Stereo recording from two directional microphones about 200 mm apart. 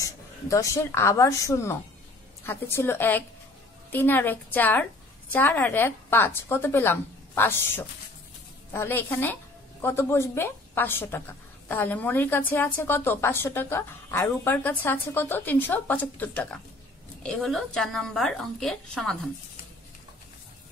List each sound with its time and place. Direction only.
0.0 s a woman's voice: 15° left (ahead or behind)